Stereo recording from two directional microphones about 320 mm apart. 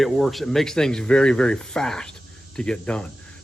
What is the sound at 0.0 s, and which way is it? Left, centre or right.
Speech, centre.